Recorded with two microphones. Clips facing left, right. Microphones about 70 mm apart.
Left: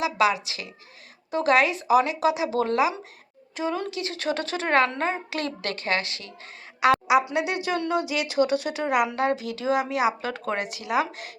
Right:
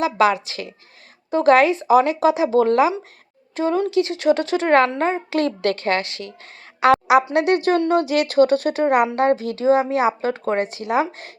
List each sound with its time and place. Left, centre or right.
0.0 s a woman's voice: right
3.9 s speech: right
6.7 s a sound: right
7.3 s speech: right